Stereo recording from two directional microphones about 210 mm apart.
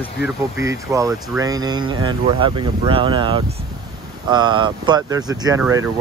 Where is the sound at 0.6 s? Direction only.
15° right (ahead or behind).